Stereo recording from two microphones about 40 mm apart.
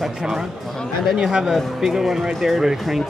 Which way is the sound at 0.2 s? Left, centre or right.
Centre.